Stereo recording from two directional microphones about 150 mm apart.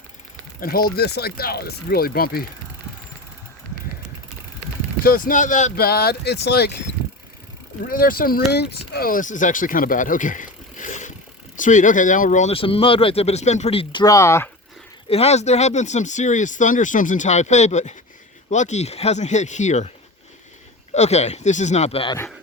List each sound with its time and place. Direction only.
0.6 s speech: 75° left (ahead or behind)
5.0 s speech: 70° left (ahead or behind)
5.7 s speech: 90° left
7.9 s speech: 75° left (ahead or behind); by 12.5 s 55° left (ahead or behind)
12.5 s speech: 40° left (ahead or behind)
14.0 s speech: 20° left (ahead or behind)
15.1 s speech: 45° left (ahead or behind)
20.9 s speech: 50° left (ahead or behind)